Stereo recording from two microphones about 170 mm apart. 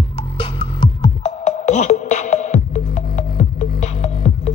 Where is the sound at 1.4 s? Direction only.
40° left (ahead or behind).